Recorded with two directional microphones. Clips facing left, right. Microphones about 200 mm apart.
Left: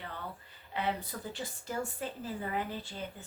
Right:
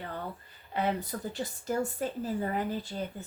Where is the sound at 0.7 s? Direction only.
45° right (ahead or behind).